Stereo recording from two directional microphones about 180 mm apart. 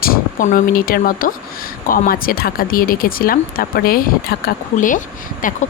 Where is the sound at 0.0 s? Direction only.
50° left (ahead or behind).